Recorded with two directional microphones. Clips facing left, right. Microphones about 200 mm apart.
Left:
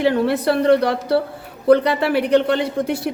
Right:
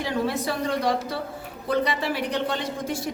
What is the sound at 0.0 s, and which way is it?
Speech, 65° left (ahead or behind).